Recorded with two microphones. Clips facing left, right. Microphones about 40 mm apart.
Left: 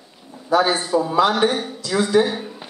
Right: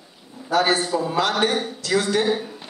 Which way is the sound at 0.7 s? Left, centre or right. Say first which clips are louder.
Left 3 dB; centre.